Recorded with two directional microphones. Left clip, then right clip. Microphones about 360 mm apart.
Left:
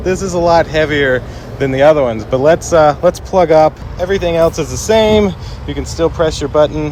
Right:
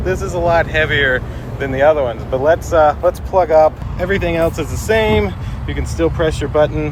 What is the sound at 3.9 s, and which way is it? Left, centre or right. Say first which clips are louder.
Speech: left 4 dB; centre.